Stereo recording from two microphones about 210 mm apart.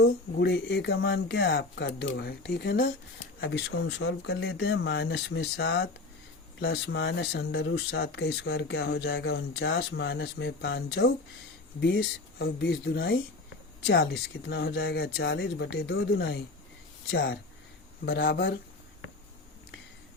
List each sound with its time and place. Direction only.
0.0 s speech: 55° left (ahead or behind)